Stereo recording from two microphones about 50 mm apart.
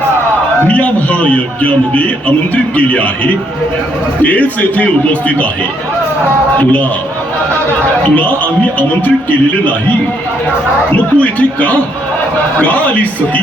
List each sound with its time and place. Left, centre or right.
0.7 s a man's voice: left
4.2 s a man's voice: left
10.9 s a man's voice: left